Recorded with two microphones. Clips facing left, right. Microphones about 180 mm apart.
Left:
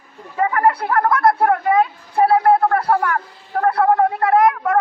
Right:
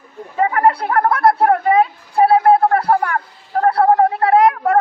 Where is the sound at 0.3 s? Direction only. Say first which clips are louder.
Right 2 dB; 25° right (ahead or behind).